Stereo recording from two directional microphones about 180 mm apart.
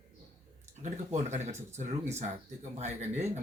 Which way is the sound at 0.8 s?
40° right (ahead or behind).